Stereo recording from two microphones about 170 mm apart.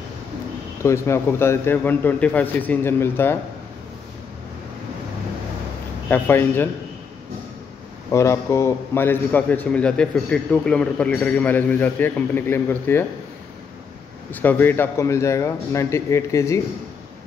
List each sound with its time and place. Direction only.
0.8 s a man's voice: 15° left (ahead or behind)
6.0 s a man's voice: 10° left (ahead or behind)
8.1 s a man's voice: 15° left (ahead or behind)
14.3 s a man's voice: 10° left (ahead or behind)